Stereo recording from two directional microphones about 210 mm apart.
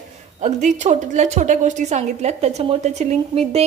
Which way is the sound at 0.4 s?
35° right (ahead or behind).